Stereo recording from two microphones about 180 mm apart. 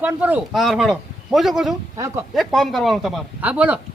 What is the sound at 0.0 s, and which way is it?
Speech, 10° right (ahead or behind).